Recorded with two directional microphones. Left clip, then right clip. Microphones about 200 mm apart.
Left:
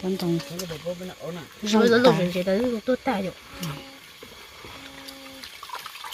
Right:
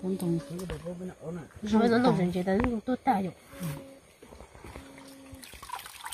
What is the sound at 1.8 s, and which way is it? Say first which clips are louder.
Speech: left 7 dB; 30° right (ahead or behind).